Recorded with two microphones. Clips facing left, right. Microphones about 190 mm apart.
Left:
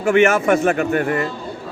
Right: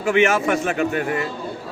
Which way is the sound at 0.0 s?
50° left (ahead or behind).